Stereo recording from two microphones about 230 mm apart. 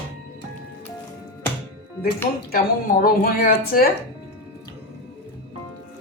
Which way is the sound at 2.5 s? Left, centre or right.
Left.